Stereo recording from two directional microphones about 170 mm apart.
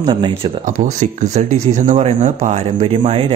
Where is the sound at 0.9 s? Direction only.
45° right (ahead or behind).